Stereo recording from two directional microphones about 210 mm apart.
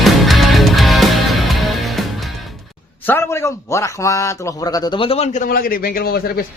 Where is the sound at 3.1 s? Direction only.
10° left (ahead or behind); by 6.2 s 45° left (ahead or behind).